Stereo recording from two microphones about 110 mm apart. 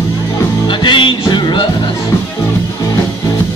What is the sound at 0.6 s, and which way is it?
Music, 45° left (ahead or behind).